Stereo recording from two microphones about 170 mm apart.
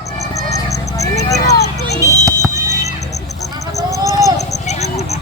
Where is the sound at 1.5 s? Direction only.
70° left (ahead or behind).